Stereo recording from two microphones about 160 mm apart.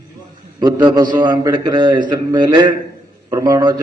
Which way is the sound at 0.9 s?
25° right (ahead or behind).